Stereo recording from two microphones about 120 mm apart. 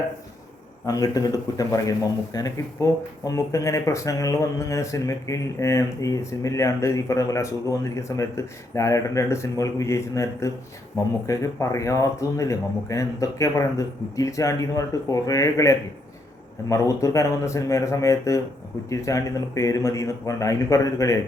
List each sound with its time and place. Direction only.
0.9 s speech: 30° left (ahead or behind)